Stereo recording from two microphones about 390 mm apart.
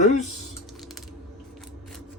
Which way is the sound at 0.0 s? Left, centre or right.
Centre.